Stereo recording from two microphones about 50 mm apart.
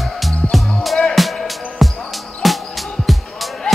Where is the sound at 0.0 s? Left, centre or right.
Centre.